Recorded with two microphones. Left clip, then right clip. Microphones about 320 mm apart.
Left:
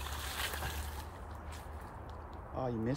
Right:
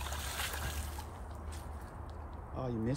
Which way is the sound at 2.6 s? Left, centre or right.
Left.